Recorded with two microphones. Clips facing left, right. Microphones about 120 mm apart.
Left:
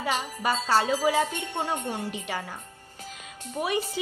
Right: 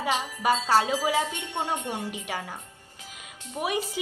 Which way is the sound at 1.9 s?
10° right (ahead or behind).